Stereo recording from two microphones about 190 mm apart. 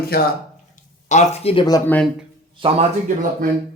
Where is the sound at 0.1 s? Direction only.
55° left (ahead or behind).